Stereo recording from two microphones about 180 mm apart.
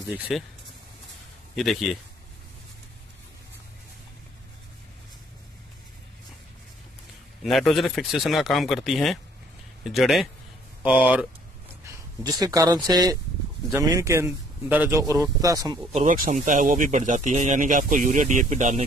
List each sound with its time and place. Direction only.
0.3 s speech: centre (ahead or behind)
1.5 s speech: centre (ahead or behind)
7.4 s speech: centre (ahead or behind)
11.9 s speech: 20° right (ahead or behind)
15.9 s speech: 40° right (ahead or behind)